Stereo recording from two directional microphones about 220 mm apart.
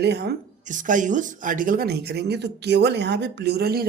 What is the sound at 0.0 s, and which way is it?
Speech, 50° right (ahead or behind).